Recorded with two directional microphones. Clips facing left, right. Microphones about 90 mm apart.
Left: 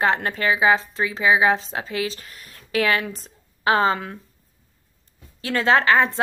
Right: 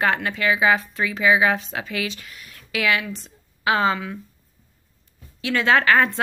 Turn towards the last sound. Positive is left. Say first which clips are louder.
# even
turn(degrees=25)  # may be behind; listen again after turning